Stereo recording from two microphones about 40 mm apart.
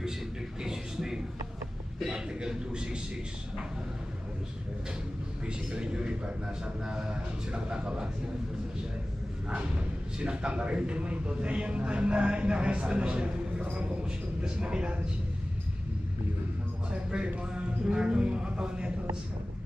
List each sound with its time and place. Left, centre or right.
0.6 s a sound: centre
2.0 s a man's voice: centre
5.5 s speech: right
9.5 s speech: right
16.9 s speech: right